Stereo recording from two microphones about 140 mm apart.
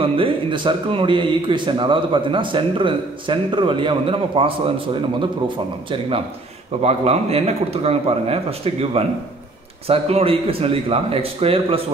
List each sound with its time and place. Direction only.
0.0 s speech: 40° right (ahead or behind)